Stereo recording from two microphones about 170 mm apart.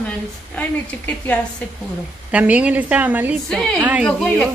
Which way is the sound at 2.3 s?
10° right (ahead or behind).